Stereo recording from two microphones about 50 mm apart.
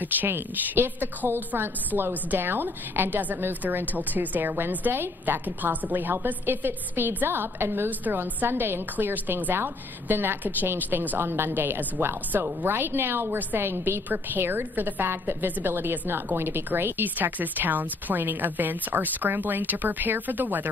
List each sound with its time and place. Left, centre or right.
0.2 s a woman's voice: right